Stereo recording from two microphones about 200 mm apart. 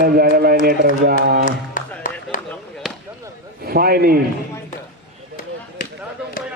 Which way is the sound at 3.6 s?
50° right (ahead or behind).